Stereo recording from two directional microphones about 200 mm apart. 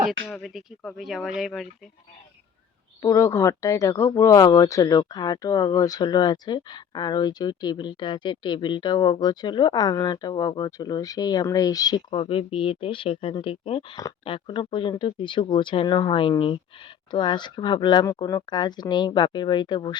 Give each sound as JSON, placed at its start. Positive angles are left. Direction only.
{"t": 0.3, "sound": "speech", "side_deg": 0}
{"t": 3.0, "sound": "speech", "side_deg": 15}